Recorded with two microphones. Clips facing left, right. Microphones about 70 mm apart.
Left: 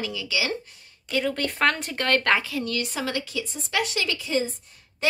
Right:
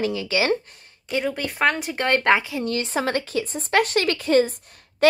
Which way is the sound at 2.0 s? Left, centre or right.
Centre.